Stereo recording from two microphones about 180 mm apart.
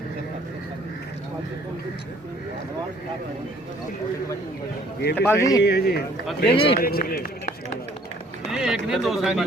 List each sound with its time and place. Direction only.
5.1 s speech: 15° left (ahead or behind)
5.6 s a man's voice: 65° left (ahead or behind)
6.5 s a man's voice: 30° left (ahead or behind)
6.7 s a man's voice: 55° left (ahead or behind)
8.4 s speech: 5° right (ahead or behind)